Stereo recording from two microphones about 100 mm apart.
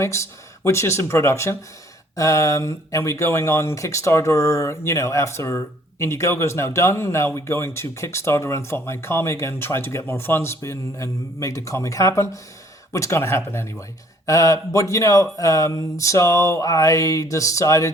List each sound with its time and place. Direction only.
0.0 s speech: 30° left (ahead or behind)